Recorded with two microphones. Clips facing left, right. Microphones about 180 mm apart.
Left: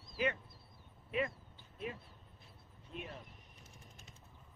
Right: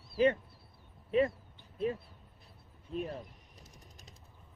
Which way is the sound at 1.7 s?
35° right (ahead or behind).